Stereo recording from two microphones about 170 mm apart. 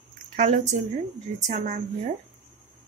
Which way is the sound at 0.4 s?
45° right (ahead or behind).